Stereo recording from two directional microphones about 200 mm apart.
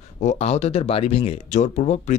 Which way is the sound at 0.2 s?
35° left (ahead or behind).